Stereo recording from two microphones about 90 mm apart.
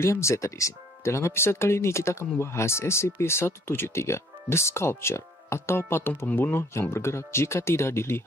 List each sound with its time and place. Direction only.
0.0 s speech: 30° left (ahead or behind)